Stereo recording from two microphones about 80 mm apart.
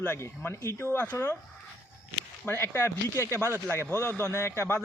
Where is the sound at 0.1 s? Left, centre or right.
Left.